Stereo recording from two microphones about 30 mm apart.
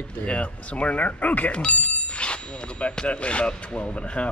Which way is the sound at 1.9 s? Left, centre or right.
Left.